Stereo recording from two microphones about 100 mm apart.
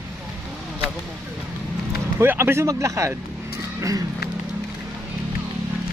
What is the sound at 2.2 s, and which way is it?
Speech, 25° right (ahead or behind).